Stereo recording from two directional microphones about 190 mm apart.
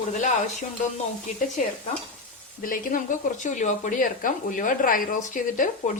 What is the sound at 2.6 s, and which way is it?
Speech, 45° left (ahead or behind).